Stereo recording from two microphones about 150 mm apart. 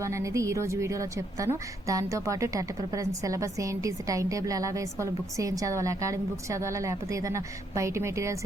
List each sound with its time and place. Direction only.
0.0 s a woman's voice: 20° right (ahead or behind)